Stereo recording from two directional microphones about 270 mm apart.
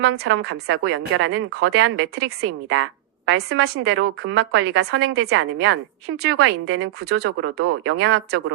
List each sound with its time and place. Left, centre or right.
0.0 s a woman's voice: right